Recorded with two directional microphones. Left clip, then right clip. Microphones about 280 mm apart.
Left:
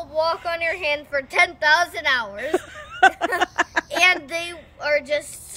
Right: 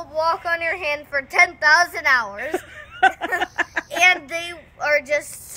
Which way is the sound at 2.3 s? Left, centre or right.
Centre.